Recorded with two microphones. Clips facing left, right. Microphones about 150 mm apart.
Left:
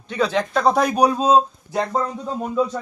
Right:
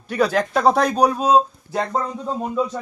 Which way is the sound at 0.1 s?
10° right (ahead or behind).